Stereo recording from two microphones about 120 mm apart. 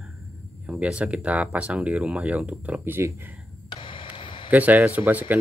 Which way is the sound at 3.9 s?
45° left (ahead or behind).